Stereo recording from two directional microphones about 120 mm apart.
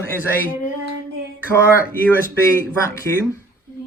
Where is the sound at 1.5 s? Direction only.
20° left (ahead or behind).